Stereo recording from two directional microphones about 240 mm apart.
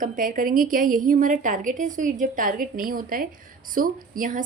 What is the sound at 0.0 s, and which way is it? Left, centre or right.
A woman's voice, right.